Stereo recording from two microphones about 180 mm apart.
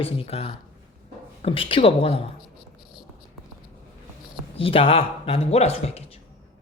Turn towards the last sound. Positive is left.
turn(degrees=35)  # may be behind; listen again after turning